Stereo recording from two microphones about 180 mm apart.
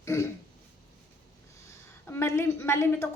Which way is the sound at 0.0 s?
15° left (ahead or behind).